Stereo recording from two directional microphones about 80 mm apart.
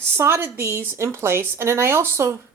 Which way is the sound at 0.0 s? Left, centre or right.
Right.